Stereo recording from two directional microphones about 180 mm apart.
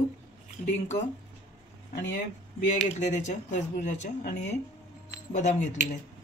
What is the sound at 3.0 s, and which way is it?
Speech, 40° left (ahead or behind).